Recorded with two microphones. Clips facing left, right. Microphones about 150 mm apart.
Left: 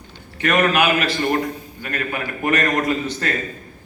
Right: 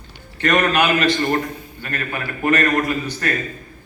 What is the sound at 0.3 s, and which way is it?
A man's voice, 10° left (ahead or behind).